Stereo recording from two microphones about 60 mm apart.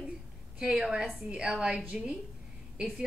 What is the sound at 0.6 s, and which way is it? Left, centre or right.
A woman's voice, centre.